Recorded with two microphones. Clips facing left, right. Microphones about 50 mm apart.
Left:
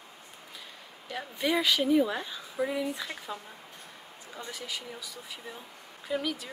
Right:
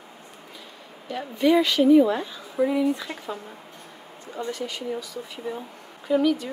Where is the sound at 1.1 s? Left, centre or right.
Centre.